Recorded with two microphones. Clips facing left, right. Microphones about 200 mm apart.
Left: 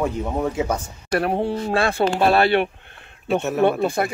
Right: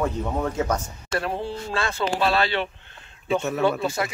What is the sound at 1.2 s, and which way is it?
Speech, 65° left (ahead or behind).